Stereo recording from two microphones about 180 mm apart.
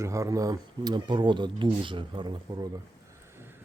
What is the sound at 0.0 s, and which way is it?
Speech, 15° right (ahead or behind).